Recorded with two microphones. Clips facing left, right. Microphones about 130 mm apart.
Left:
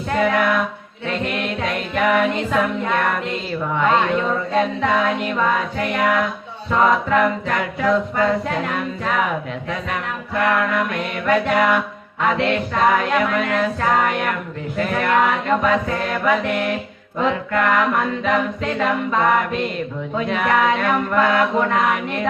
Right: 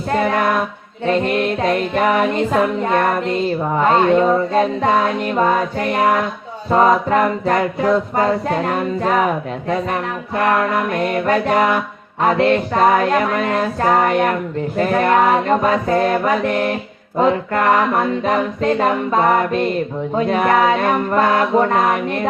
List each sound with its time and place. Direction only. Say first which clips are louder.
0.1 s music: right 1 dB; 40° right (ahead or behind)